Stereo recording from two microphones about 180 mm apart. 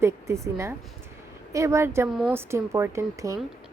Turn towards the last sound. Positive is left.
turn(degrees=-15)  # may be behind; listen again after turning